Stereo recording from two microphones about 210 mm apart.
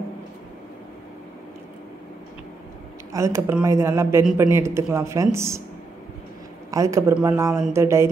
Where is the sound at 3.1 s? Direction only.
15° right (ahead or behind).